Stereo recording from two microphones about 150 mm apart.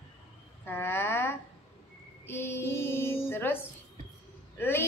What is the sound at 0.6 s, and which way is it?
Speech, 15° left (ahead or behind).